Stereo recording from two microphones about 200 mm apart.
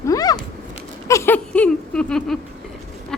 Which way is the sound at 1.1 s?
15° left (ahead or behind).